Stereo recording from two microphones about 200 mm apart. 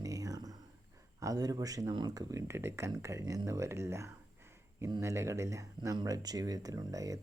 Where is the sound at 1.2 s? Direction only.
20° right (ahead or behind).